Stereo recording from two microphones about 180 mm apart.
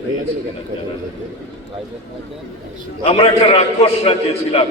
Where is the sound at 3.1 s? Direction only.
30° left (ahead or behind).